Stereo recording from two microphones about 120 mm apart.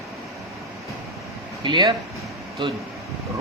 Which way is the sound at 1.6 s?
40° right (ahead or behind).